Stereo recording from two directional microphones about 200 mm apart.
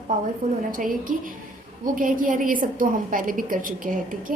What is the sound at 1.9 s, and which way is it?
A woman's voice, 40° right (ahead or behind).